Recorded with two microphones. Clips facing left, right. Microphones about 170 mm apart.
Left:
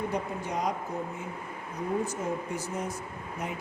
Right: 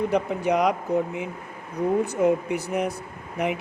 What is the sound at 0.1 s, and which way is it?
Speech, 70° right (ahead or behind).